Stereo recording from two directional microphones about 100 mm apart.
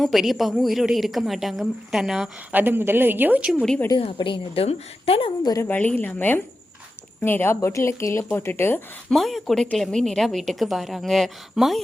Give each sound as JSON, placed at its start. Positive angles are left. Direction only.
{"t": 0.0, "sound": "a woman's voice", "side_deg": 0}
{"t": 2.5, "sound": "a woman's voice", "side_deg": -20}
{"t": 3.5, "sound": "a woman's voice", "side_deg": 5}
{"t": 4.0, "sound": "a woman's voice", "side_deg": 65}
{"t": 5.4, "sound": "a woman's voice", "side_deg": 40}
{"t": 5.6, "sound": "speech", "side_deg": 15}
{"t": 9.0, "sound": "a woman's voice", "side_deg": 0}